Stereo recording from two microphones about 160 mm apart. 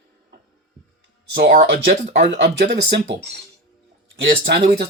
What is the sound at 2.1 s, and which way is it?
Speech, 90° right.